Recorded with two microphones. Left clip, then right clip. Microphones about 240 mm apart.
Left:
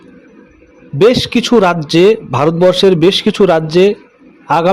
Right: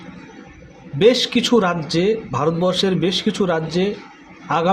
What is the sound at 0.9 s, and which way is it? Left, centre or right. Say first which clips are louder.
A man's voice: left 5 dB; left.